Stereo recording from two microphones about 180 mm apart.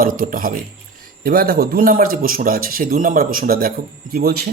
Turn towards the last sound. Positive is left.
turn(degrees=-60)  # may be behind; listen again after turning